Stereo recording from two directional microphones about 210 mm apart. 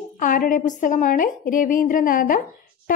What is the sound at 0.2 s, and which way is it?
A woman's voice, 40° left (ahead or behind).